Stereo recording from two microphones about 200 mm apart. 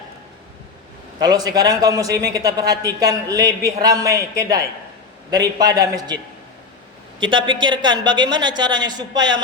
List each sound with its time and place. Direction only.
1.2 s a man's voice: 20° right (ahead or behind)
7.4 s a man's voice: 25° right (ahead or behind)